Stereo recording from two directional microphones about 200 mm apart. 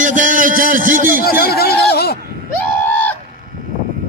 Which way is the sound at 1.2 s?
50° left (ahead or behind).